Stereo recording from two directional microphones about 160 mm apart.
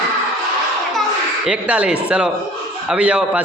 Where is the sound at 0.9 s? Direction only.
Centre (ahead or behind).